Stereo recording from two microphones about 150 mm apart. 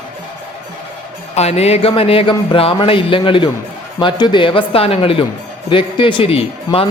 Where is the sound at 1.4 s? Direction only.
45° left (ahead or behind).